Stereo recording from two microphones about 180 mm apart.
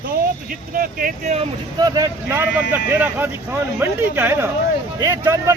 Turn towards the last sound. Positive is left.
turn(degrees=-15)  # may be behind; listen again after turning